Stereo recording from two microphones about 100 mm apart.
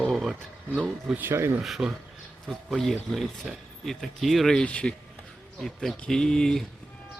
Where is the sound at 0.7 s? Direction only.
10° right (ahead or behind).